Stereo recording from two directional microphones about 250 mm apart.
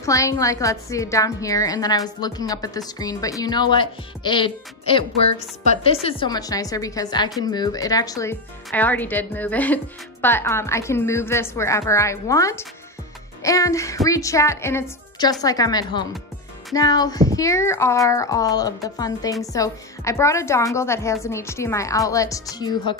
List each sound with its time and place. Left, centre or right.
0.0 s a woman's voice: centre